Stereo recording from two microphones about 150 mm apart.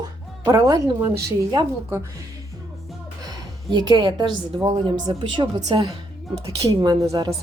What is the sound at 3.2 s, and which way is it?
A woman's voice, 30° right (ahead or behind).